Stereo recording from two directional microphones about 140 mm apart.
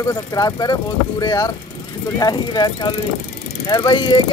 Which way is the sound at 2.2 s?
30° left (ahead or behind).